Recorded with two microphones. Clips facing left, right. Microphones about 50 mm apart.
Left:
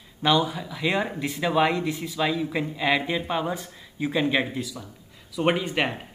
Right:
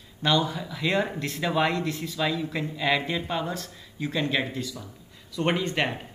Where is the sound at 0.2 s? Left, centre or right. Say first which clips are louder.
Left 2 dB; centre.